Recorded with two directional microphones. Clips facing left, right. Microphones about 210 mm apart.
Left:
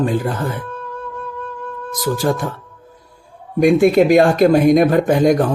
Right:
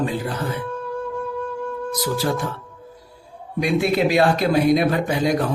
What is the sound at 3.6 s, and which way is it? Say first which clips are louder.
Speech: left 8 dB; 50° left (ahead or behind).